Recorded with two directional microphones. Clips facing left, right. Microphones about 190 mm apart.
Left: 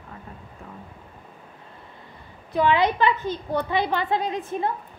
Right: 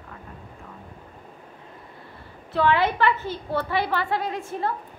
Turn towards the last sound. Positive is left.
turn(degrees=20)  # may be behind; listen again after turning